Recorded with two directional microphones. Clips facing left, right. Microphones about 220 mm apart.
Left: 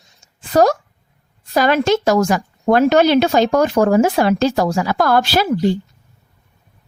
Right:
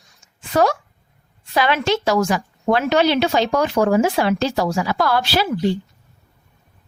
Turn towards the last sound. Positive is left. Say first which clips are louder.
# left 4 dB
turn(degrees=45)  # may be behind; listen again after turning